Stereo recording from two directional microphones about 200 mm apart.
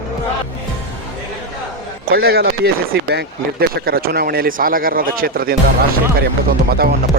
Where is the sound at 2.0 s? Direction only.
50° right (ahead or behind).